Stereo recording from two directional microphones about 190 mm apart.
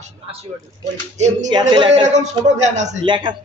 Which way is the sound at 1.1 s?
35° right (ahead or behind).